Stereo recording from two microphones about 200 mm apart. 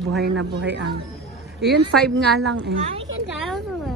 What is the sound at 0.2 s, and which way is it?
Speech, 65° right (ahead or behind).